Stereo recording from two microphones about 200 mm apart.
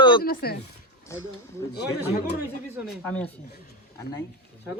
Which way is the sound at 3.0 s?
10° left (ahead or behind).